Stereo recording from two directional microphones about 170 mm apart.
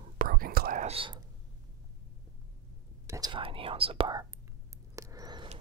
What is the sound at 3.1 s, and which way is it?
Whispering, 25° right (ahead or behind).